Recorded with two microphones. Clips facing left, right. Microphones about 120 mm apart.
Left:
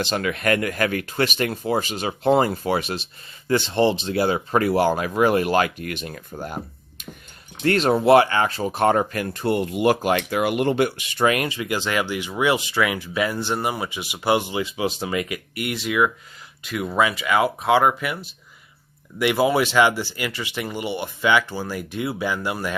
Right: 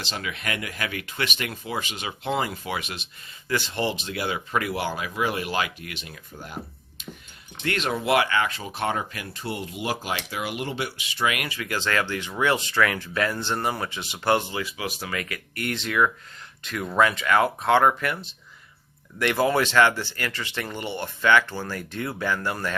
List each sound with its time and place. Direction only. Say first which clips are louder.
0.0 s speech: left 9 dB; 55° left (ahead or behind)
7.6 s speech: left 8 dB; 40° left (ahead or behind)
11.3 s speech: left 5 dB; 25° left (ahead or behind)